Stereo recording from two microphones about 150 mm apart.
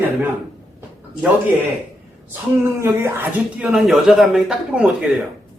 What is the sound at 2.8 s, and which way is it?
Speech, 15° right (ahead or behind).